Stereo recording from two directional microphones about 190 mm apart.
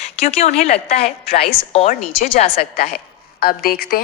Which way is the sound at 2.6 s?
55° left (ahead or behind).